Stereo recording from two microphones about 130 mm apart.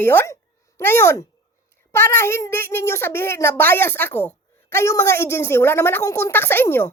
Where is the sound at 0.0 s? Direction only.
15° left (ahead or behind).